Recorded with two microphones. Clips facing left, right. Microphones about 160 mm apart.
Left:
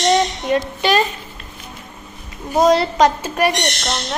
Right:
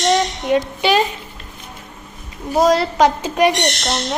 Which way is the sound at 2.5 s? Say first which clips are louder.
Left 1 dB; centre (ahead or behind).